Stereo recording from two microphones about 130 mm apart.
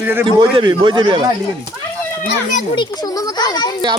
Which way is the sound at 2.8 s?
30° left (ahead or behind).